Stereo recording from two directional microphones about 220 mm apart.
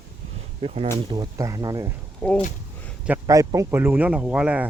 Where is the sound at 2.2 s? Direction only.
5° left (ahead or behind).